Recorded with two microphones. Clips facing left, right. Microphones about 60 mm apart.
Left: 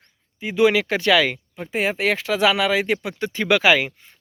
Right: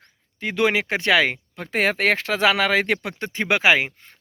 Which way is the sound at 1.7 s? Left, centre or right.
Right.